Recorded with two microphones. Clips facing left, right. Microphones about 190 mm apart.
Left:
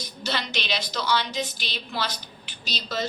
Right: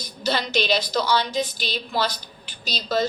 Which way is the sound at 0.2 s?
40° right (ahead or behind).